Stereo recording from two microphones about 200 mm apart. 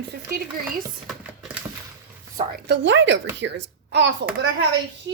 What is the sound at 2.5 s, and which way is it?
A child's voice, 60° right (ahead or behind).